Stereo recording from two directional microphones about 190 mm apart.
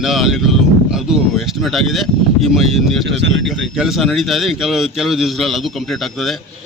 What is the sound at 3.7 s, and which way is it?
A man's voice, centre (ahead or behind).